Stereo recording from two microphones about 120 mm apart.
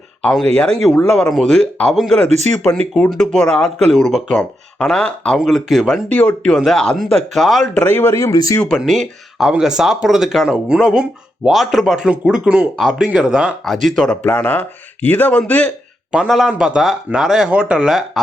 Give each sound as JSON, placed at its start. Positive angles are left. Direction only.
{"t": 0.5, "sound": "speech", "side_deg": 5}
{"t": 6.1, "sound": "speech", "side_deg": 10}
{"t": 7.8, "sound": "speech", "side_deg": 15}
{"t": 8.8, "sound": "speech", "side_deg": 0}
{"t": 13.8, "sound": "speech", "side_deg": 5}
{"t": 16.1, "sound": "speech", "side_deg": -5}